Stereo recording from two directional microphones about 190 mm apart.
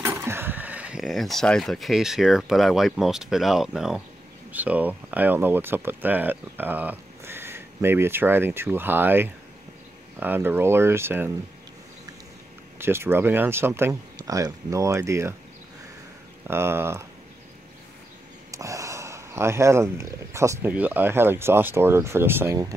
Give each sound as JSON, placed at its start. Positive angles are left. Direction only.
{"t": 0.0, "sound": "speech", "side_deg": -15}
{"t": 12.7, "sound": "speech", "side_deg": -10}
{"t": 16.4, "sound": "speech", "side_deg": -10}
{"t": 18.5, "sound": "speech", "side_deg": -15}